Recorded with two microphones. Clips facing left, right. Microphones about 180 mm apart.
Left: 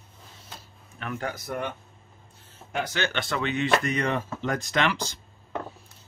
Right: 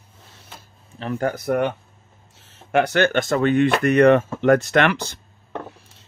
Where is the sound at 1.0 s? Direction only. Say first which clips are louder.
Right 8 dB; 35° right (ahead or behind).